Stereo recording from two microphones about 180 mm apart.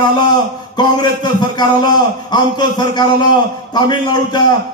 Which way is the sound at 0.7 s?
25° left (ahead or behind).